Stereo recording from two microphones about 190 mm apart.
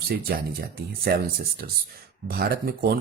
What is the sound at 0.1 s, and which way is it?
Speech, 55° right (ahead or behind).